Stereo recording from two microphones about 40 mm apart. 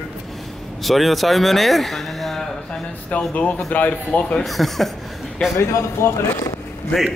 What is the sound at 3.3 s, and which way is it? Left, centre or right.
Speech, left.